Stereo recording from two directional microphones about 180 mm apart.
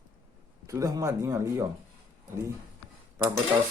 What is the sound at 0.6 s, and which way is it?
Speech, 15° right (ahead or behind).